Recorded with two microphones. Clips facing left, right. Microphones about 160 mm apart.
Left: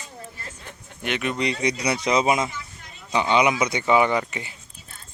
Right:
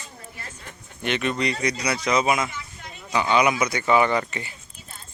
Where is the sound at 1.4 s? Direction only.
20° left (ahead or behind).